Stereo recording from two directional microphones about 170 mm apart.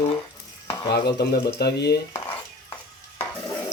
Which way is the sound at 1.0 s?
75° left (ahead or behind).